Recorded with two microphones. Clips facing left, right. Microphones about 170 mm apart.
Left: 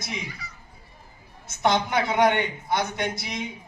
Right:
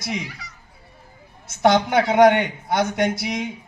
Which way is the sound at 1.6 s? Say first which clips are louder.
Right 6 dB; 65° right (ahead or behind).